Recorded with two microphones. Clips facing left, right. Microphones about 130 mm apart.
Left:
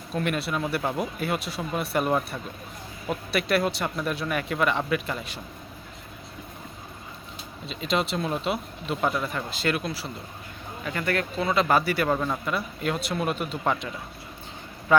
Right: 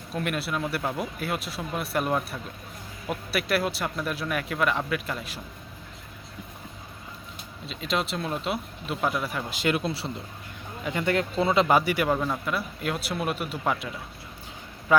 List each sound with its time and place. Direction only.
0.1 s speech: centre (ahead or behind)
7.7 s speech: centre (ahead or behind); by 9.8 s 15° right (ahead or behind)
9.8 s a man's voice: 30° right (ahead or behind)
12.1 s speech: centre (ahead or behind)